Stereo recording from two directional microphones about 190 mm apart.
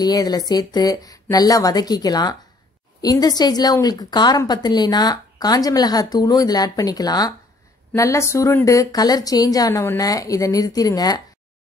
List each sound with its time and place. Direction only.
0.0 s a woman's voice: 20° left (ahead or behind)